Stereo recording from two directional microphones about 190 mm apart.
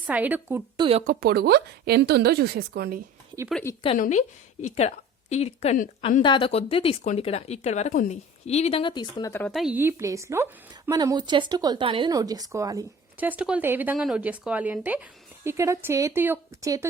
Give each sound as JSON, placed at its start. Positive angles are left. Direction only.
{"t": 0.1, "sound": "speech", "side_deg": -10}
{"t": 0.8, "sound": "speech", "side_deg": -30}
{"t": 1.0, "sound": "a woman's voice", "side_deg": -55}
{"t": 3.5, "sound": "speech", "side_deg": 15}
{"t": 3.9, "sound": "speech", "side_deg": 40}
{"t": 9.5, "sound": "a woman's voice", "side_deg": 0}
{"t": 9.7, "sound": "speech", "side_deg": -15}